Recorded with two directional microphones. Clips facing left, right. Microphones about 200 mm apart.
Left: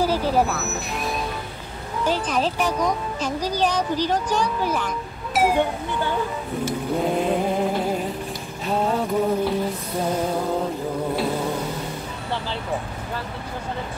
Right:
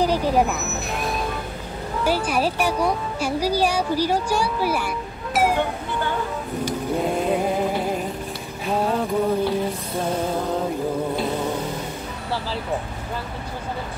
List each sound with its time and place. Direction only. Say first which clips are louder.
0.0 s vehicle: right 1 dB; 15° right (ahead or behind)
0.9 s music: right 2 dB; centre (ahead or behind)
2.0 s speech: right 1 dB; 10° right (ahead or behind)
7.0 s a sound: even; centre (ahead or behind)